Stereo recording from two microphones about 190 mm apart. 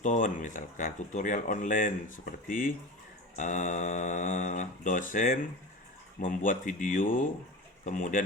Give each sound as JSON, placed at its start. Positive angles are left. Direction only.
{"t": 0.0, "sound": "speech", "side_deg": 40}